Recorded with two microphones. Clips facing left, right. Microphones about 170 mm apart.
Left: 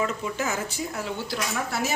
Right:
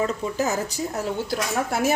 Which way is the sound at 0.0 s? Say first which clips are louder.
Right 4 dB; 40° right (ahead or behind).